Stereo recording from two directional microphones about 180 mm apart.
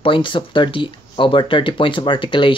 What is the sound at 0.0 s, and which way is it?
Speech, 30° left (ahead or behind).